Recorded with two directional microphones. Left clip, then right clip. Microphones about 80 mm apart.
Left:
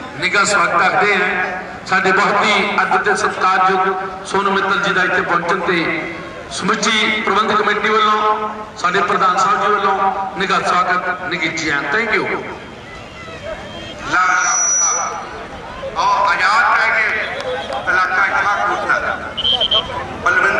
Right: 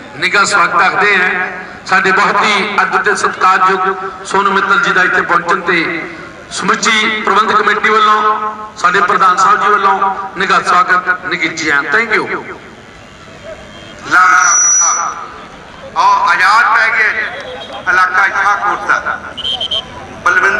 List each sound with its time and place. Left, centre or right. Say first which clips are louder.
0.2 s a man's voice: right 4 dB; right
14.0 s sheep: right 7 dB; right
15.9 s a man's voice: right 5 dB; right